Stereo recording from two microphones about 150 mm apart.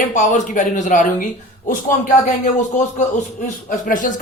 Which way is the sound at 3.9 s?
60° left (ahead or behind).